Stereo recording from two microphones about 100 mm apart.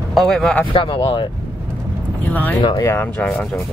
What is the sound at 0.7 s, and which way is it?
Speech, 60° left (ahead or behind).